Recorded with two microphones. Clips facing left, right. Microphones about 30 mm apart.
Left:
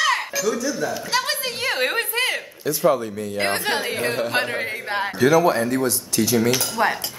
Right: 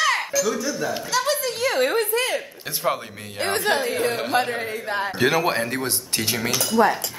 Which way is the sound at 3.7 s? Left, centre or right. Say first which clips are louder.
Right 1 dB; left.